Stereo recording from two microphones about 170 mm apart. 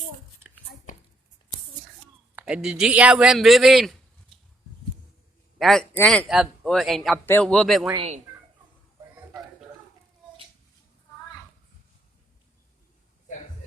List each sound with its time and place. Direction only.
2.3 s a man's voice: 5° right (ahead or behind)
5.5 s a man's voice: centre (ahead or behind)
7.9 s speech: 40° right (ahead or behind)